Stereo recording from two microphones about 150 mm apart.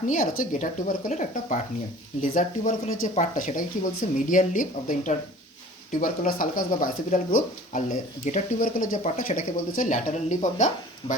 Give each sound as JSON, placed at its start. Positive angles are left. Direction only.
{"t": 0.1, "sound": "speech", "side_deg": 60}